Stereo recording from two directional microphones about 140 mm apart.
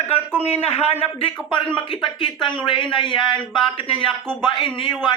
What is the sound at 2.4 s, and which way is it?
A man's voice, 35° left (ahead or behind).